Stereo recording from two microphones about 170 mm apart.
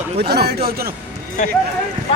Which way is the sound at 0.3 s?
70° right (ahead or behind).